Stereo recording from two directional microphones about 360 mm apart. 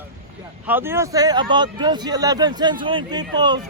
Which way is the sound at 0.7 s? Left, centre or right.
Centre.